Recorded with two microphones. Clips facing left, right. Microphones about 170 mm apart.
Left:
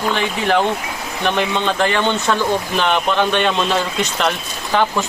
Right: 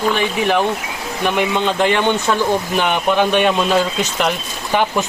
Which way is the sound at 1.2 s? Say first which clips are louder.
Right 1 dB; 10° right (ahead or behind).